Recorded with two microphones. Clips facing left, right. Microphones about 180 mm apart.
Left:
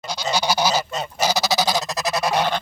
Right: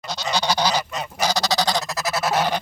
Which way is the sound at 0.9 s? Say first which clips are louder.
Left 2 dB; 30° left (ahead or behind).